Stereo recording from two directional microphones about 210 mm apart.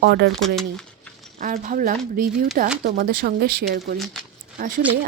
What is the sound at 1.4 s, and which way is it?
A woman's voice, 40° right (ahead or behind).